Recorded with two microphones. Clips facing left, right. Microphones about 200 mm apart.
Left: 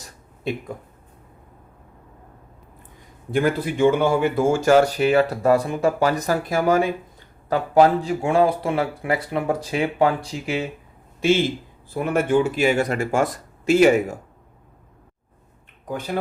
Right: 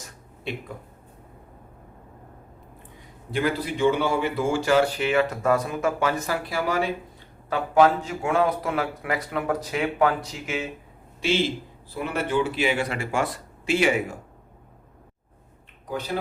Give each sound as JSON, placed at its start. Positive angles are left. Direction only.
{"t": 3.3, "sound": "speech", "side_deg": 50}
{"t": 7.5, "sound": "speech", "side_deg": 35}
{"t": 11.9, "sound": "speech", "side_deg": 50}
{"t": 15.9, "sound": "speech", "side_deg": 50}